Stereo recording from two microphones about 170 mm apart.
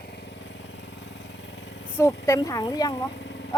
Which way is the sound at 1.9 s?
15° left (ahead or behind).